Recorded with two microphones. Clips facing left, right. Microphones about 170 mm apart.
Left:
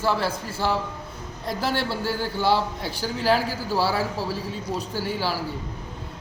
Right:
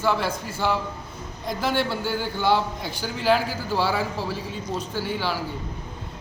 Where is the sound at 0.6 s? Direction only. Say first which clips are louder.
Even; centre (ahead or behind).